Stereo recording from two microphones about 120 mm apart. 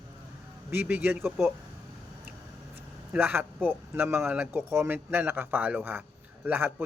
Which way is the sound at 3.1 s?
15° right (ahead or behind).